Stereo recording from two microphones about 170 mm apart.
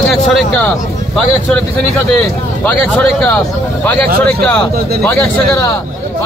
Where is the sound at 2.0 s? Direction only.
5° left (ahead or behind).